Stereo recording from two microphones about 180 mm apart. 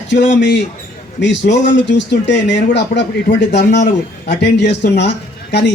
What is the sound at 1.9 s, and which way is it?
Speech, 75° left (ahead or behind).